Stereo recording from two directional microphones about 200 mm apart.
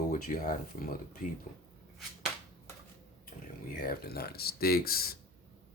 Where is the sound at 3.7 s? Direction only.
45° left (ahead or behind).